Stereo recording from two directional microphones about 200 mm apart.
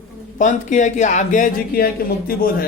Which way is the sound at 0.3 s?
40° left (ahead or behind).